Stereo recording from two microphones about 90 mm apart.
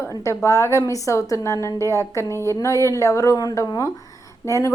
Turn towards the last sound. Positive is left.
turn(degrees=35)  # may be behind; listen again after turning